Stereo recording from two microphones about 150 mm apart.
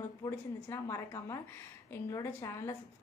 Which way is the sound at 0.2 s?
20° left (ahead or behind).